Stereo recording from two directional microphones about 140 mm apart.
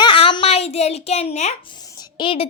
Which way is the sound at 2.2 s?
40° left (ahead or behind).